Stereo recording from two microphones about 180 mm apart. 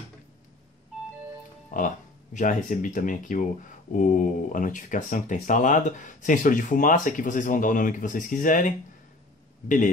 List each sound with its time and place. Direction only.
1.7 s music: 45° left (ahead or behind)
2.3 s speech: 45° left (ahead or behind)